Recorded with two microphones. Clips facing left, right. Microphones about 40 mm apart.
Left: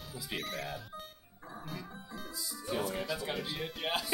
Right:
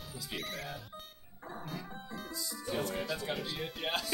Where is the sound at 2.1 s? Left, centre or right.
Centre.